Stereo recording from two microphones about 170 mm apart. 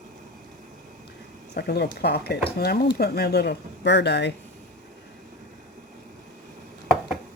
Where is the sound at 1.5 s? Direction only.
75° left (ahead or behind).